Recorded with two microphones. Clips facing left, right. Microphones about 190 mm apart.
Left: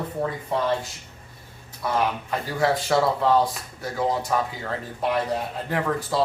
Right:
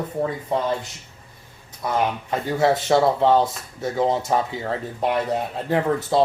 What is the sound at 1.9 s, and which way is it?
Speech, 25° right (ahead or behind).